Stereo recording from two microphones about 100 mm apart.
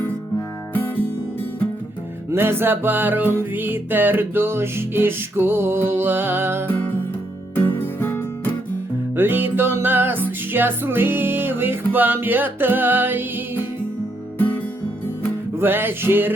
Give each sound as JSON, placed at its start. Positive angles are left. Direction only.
{"t": 2.3, "sound": "music", "side_deg": -25}
{"t": 7.9, "sound": "music", "side_deg": 25}
{"t": 9.1, "sound": "music", "side_deg": -20}
{"t": 14.3, "sound": "music", "side_deg": 20}
{"t": 15.5, "sound": "music", "side_deg": -20}